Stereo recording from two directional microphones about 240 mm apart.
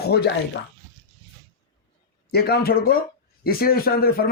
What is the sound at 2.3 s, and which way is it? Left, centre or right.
Speech, left.